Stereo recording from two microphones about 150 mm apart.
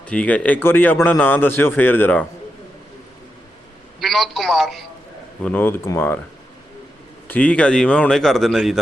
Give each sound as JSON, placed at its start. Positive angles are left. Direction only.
{"t": 0.0, "sound": "speech", "side_deg": 10}
{"t": 4.0, "sound": "a man's voice", "side_deg": 0}
{"t": 7.3, "sound": "a man's voice", "side_deg": 10}